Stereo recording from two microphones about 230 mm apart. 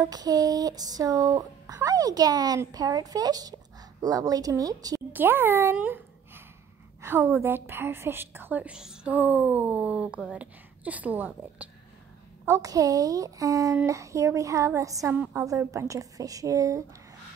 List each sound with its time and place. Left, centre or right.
0.0 s a child's voice: centre